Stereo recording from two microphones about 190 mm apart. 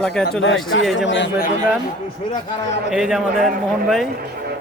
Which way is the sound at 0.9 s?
75° left (ahead or behind).